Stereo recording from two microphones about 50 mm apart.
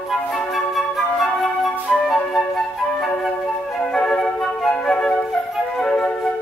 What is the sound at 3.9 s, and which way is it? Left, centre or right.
Flute, centre.